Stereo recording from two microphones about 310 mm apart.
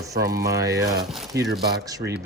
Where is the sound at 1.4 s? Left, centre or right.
Right.